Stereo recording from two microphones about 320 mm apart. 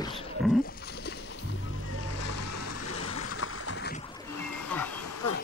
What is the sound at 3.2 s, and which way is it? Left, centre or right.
Boat, left.